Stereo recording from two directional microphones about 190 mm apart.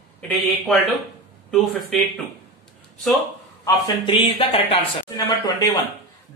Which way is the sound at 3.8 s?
25° left (ahead or behind).